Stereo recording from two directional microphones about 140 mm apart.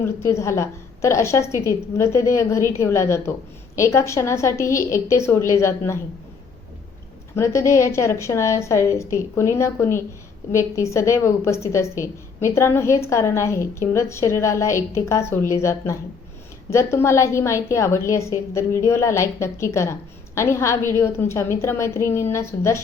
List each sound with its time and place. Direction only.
0.0 s a woman's voice: 20° left (ahead or behind)
7.3 s a woman's voice: 20° left (ahead or behind)